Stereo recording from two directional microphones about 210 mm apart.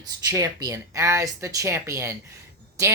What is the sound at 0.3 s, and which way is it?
Speech, 15° right (ahead or behind).